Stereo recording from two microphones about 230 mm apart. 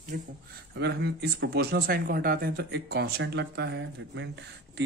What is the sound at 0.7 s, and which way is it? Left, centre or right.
Speech, right.